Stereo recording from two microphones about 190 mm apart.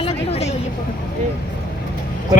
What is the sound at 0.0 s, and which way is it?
Vehicle, 30° left (ahead or behind).